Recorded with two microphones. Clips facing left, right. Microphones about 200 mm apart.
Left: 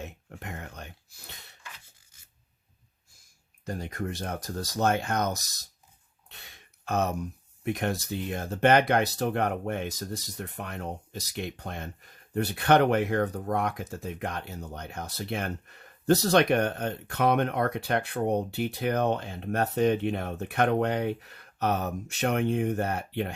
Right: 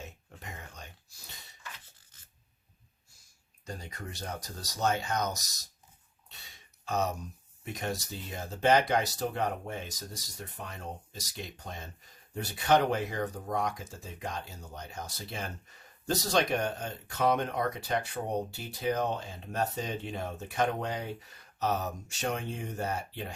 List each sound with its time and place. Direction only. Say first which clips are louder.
0.0 s a sound: left 6 dB; 65° left (ahead or behind)
2.1 s rub: right 1 dB; 10° left (ahead or behind)
3.7 s speech: left 9 dB; 55° left (ahead or behind)
6.8 s speech: left 4 dB; 60° left (ahead or behind)